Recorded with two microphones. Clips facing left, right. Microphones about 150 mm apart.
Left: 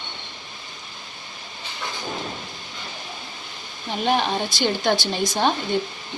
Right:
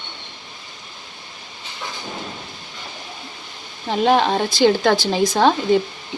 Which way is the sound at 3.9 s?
90° right.